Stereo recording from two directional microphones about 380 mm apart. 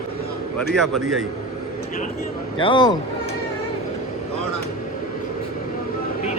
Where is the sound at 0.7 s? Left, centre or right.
Centre.